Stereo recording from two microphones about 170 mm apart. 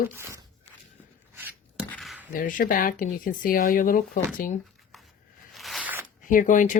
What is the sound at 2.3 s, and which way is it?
Speech, 50° left (ahead or behind).